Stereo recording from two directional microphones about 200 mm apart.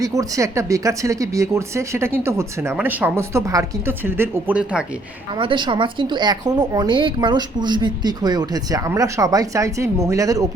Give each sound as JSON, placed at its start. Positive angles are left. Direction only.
{"t": 0.0, "sound": "speech", "side_deg": -15}
{"t": 5.4, "sound": "speech", "side_deg": -25}